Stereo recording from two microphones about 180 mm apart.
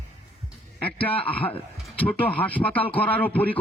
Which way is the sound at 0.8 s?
10° left (ahead or behind).